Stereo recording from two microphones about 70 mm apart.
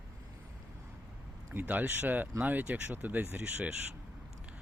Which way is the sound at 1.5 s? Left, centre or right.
Right.